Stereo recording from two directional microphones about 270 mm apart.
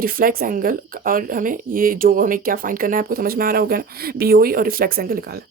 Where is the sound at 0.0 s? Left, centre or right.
Right.